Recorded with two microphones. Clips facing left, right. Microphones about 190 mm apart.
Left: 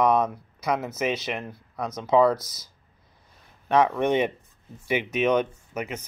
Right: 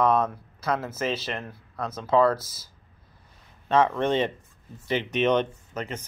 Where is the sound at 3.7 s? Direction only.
15° left (ahead or behind).